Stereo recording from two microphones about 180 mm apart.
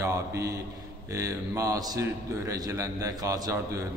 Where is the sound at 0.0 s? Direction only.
15° right (ahead or behind).